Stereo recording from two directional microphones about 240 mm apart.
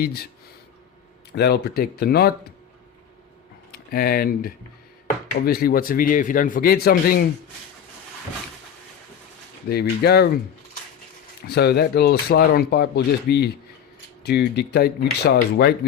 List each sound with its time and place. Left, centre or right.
0.0 s speech: left
1.4 s speech: left
3.7 s speech: left
9.6 s speech: left
11.4 s speech: left